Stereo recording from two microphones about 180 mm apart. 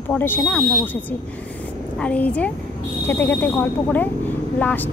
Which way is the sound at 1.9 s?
5° left (ahead or behind).